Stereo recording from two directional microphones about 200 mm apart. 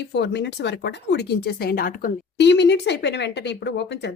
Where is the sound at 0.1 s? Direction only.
60° left (ahead or behind).